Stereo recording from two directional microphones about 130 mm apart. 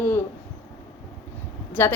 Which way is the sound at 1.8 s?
20° left (ahead or behind).